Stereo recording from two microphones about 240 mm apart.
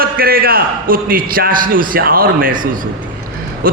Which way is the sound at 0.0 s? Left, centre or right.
Right.